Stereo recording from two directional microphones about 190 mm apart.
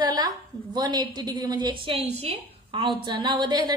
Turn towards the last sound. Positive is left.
turn(degrees=-25)  # may be behind; listen again after turning